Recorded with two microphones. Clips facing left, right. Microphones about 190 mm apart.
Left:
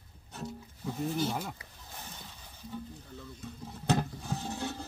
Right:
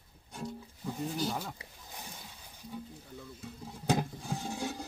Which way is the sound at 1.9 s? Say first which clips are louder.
Left 1 dB; 10° right (ahead or behind).